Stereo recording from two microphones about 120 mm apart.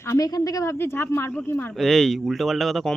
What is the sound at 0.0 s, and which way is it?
Speech, 25° left (ahead or behind).